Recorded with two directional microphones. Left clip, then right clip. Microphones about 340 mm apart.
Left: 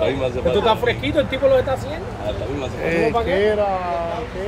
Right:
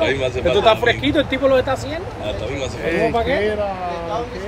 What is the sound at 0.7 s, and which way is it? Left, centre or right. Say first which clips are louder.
Speech: right 3 dB; right.